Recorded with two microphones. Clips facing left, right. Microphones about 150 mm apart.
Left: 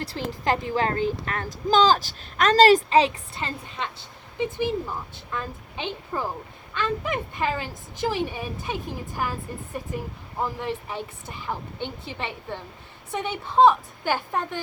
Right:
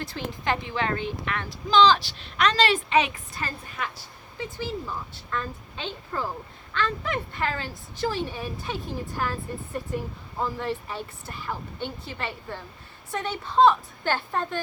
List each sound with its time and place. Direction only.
0.0 s a woman's voice: 35° left (ahead or behind); by 9.3 s 15° left (ahead or behind)
10.4 s a woman's voice: 15° left (ahead or behind)